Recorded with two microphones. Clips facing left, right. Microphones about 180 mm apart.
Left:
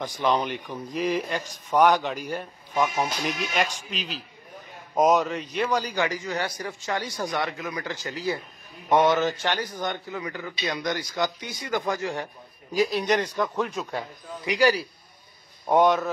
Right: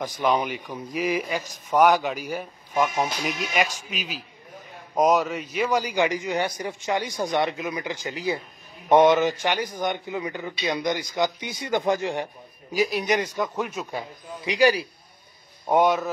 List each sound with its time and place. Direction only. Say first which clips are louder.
0.0 s a man's voice: right 1 dB; 10° right (ahead or behind)
12.7 s speech: even; 10° right (ahead or behind)
15.7 s a man's voice: even; 5° right (ahead or behind)